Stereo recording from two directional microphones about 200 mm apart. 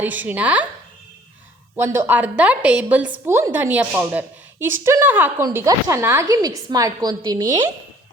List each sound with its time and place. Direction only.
0.0 s a woman's voice: 10° right (ahead or behind)
1.7 s a woman's voice: 10° right (ahead or behind)